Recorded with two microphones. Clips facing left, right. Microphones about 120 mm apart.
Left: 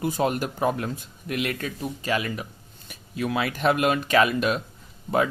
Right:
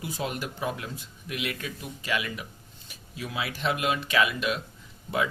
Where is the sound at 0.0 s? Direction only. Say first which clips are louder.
Left 8 dB; 50° left (ahead or behind).